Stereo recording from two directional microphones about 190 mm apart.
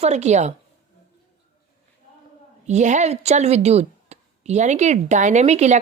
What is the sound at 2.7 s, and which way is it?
A woman's voice, 40° right (ahead or behind).